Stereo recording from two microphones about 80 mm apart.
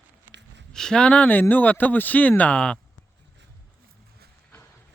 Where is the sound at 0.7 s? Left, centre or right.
Centre.